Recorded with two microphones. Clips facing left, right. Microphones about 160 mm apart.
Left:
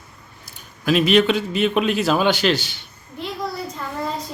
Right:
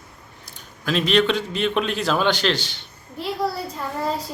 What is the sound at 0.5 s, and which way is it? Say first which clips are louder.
A man's voice: left 5 dB; 10° left (ahead or behind).